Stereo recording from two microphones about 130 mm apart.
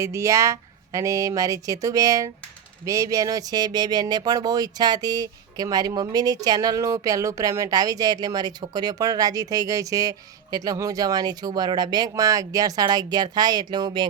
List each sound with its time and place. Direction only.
0.0 s speech: 25° right (ahead or behind)